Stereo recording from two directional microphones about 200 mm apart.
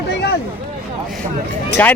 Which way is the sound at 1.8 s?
10° left (ahead or behind).